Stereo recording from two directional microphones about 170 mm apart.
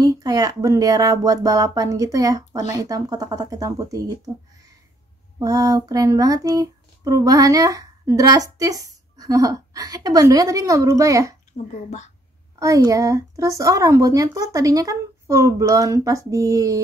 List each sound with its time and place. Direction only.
0.0 s speech: 20° right (ahead or behind)
5.4 s speech: 20° right (ahead or behind)
12.5 s speech: 20° right (ahead or behind)